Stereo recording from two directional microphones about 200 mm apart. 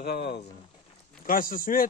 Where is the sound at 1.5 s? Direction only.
45° left (ahead or behind).